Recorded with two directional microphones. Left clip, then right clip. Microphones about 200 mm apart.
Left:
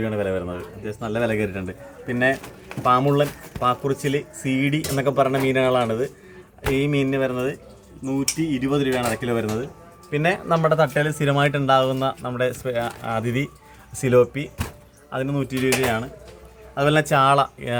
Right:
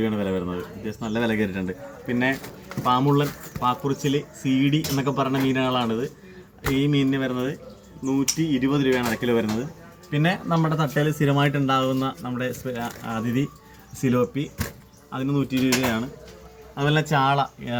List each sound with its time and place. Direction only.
0.0 s speech: 20° left (ahead or behind)
1.0 s speech: 35° left (ahead or behind)
2.0 s speech: 50° left (ahead or behind)